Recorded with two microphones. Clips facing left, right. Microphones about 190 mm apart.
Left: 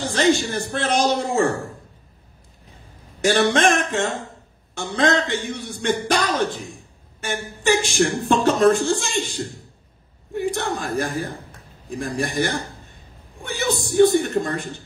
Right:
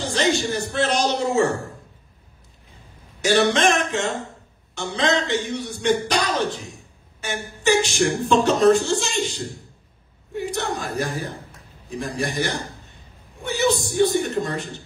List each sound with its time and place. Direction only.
0.0 s a woman's voice: 50° left (ahead or behind)
3.2 s a woman's voice: 50° left (ahead or behind)
13.4 s a sound: 50° left (ahead or behind)